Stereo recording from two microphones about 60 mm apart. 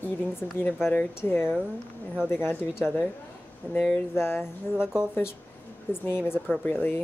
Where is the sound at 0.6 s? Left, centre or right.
Left.